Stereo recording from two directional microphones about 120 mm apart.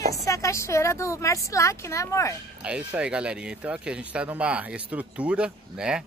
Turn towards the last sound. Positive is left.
turn(degrees=-5)  # may be behind; listen again after turning